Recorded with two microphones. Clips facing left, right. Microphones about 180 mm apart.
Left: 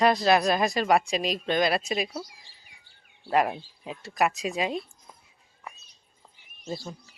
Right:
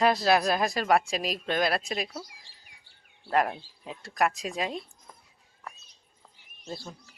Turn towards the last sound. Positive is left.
turn(degrees=0)  # may be behind; listen again after turning